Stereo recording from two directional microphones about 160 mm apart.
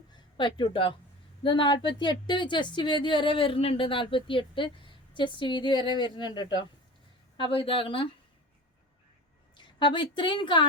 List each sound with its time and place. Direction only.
0.3 s speech: 30° left (ahead or behind)
9.6 s a woman's voice: 30° left (ahead or behind)